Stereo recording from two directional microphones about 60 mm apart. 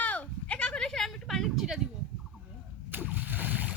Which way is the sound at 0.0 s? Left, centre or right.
Left.